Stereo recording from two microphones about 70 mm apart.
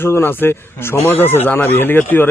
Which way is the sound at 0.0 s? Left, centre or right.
Left.